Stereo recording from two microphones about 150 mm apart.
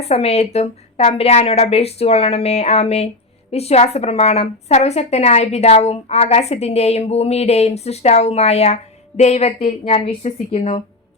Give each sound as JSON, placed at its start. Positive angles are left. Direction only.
{"t": 0.0, "sound": "a woman's voice", "side_deg": 45}